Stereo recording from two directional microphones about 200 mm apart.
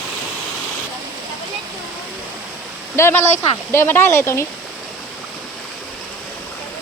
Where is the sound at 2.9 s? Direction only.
15° left (ahead or behind).